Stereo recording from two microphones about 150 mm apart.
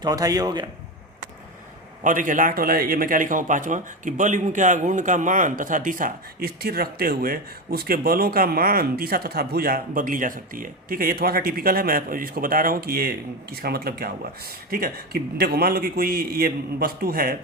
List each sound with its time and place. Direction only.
0.0 s a man's voice: 25° right (ahead or behind)
2.0 s speech: 60° right (ahead or behind)